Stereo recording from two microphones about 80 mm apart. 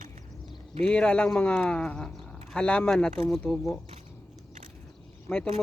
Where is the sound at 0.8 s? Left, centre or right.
Centre.